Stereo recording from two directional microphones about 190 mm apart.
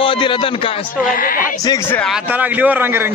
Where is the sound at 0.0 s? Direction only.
25° left (ahead or behind).